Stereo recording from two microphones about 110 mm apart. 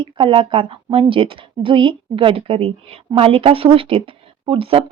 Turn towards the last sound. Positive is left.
turn(degrees=-55)  # may be behind; listen again after turning